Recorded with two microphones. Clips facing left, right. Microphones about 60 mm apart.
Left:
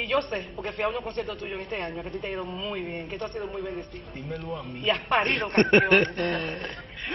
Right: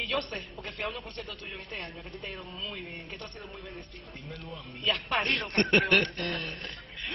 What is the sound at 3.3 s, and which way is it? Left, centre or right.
Speech, left.